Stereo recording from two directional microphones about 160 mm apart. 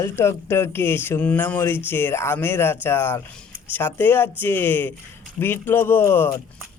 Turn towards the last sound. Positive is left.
turn(degrees=15)  # may be behind; listen again after turning